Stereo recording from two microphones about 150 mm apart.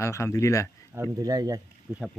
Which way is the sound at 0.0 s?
20° left (ahead or behind).